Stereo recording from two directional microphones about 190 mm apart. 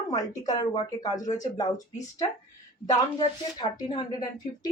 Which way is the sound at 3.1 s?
20° left (ahead or behind).